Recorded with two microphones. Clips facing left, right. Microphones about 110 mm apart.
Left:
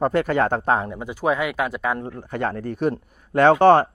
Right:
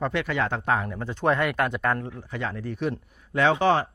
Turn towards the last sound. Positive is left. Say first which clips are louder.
# left 7 dB
turn(degrees=55)  # may be behind; listen again after turning